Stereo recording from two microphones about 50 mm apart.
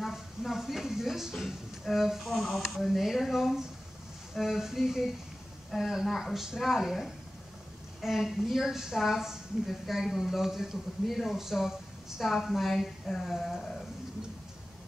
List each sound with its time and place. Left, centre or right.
0.0 s a woman's voice: centre